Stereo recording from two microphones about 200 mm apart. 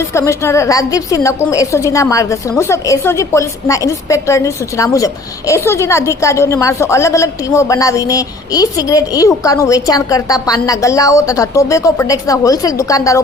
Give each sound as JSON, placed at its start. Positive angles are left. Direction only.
{"t": 0.1, "sound": "a woman's voice", "side_deg": 15}